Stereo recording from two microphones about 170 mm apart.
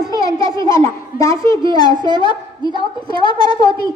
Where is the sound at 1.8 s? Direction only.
25° left (ahead or behind).